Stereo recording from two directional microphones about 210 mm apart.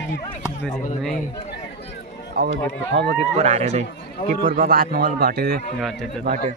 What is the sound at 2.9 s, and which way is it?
Speech, 50° right (ahead or behind).